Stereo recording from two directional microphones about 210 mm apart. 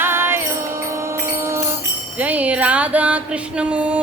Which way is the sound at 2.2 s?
5° right (ahead or behind).